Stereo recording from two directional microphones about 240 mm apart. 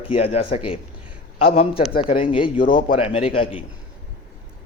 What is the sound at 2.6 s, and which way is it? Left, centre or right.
Speech, left.